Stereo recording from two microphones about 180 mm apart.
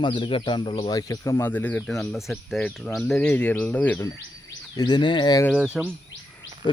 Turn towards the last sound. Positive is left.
turn(degrees=25)  # may be behind; listen again after turning